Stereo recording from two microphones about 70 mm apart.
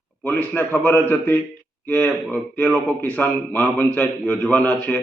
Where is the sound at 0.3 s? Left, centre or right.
Left.